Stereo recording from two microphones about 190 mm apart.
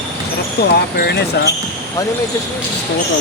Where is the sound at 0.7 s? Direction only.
60° left (ahead or behind).